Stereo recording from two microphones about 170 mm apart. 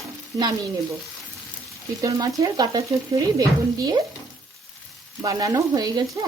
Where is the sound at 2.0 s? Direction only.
20° right (ahead or behind).